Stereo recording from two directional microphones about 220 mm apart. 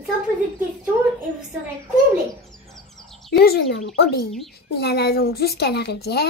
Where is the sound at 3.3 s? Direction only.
45° left (ahead or behind).